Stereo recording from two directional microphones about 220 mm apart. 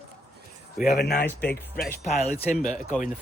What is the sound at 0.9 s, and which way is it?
Speech, 45° left (ahead or behind).